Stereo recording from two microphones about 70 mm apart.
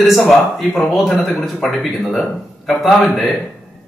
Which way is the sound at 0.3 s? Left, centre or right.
Centre.